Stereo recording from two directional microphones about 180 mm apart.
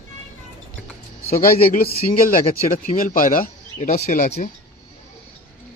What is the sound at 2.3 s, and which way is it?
Speech, 45° left (ahead or behind).